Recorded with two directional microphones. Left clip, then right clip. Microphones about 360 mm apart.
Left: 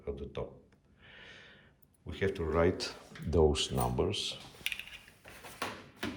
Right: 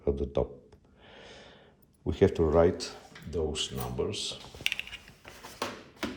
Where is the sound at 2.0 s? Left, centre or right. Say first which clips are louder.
Right 9 dB; centre.